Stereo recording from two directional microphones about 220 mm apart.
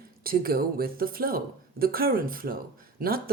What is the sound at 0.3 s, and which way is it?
Speech, 45° right (ahead or behind).